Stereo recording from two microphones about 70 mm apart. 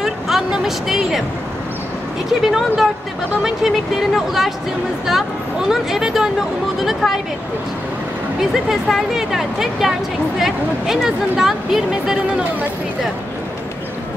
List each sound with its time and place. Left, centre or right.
0.0 s speech: centre
2.4 s speech: centre
5.7 s speech: centre
8.8 s speech: centre